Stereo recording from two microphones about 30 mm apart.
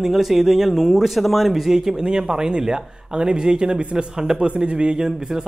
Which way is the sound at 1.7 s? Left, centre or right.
Right.